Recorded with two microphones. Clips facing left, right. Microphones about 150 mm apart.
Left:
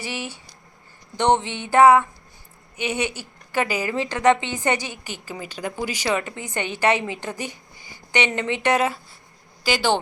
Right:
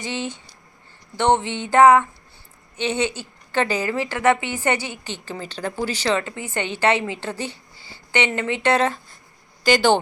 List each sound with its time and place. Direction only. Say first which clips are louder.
0.0 s a woman's voice: right 3 dB; 10° left (ahead or behind)